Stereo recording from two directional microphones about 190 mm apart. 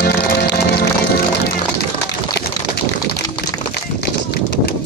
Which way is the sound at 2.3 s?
60° left (ahead or behind).